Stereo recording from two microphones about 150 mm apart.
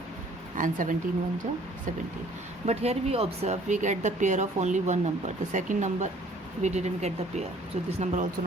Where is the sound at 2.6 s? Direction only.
45° right (ahead or behind).